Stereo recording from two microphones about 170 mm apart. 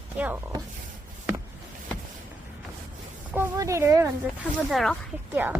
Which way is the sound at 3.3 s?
15° right (ahead or behind).